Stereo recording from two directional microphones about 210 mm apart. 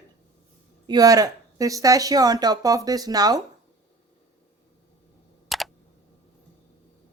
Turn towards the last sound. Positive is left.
turn(degrees=0)  # may be behind; listen again after turning